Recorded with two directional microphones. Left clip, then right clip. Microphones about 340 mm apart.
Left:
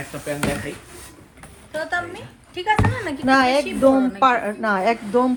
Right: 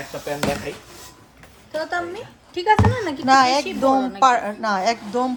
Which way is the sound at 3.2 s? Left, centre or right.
Centre.